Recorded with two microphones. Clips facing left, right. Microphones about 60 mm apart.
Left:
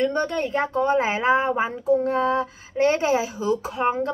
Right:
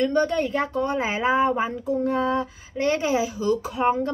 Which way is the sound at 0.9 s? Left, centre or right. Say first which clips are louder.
Even; left.